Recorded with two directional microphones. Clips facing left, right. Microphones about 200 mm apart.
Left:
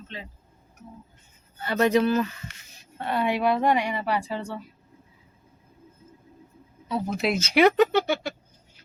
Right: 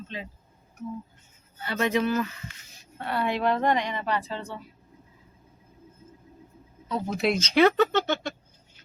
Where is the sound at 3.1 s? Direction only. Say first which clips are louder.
Left 2 dB; 15° left (ahead or behind).